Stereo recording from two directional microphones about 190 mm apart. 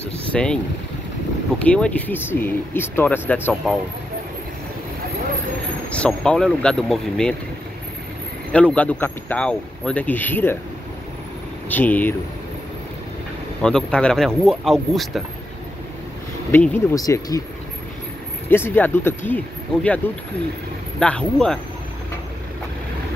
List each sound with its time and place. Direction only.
0.3 s speech: 5° left (ahead or behind)
1.6 s speech: 5° left (ahead or behind)
5.9 s speech: 5° left (ahead or behind)
8.5 s speech: 5° left (ahead or behind)
11.7 s speech: 10° left (ahead or behind)
13.6 s speech: 5° left (ahead or behind)
16.5 s speech: 10° left (ahead or behind)
18.5 s speech: 10° left (ahead or behind)
21.0 s speech: 5° left (ahead or behind)